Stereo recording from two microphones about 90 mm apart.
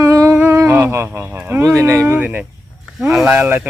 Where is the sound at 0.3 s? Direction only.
30° right (ahead or behind).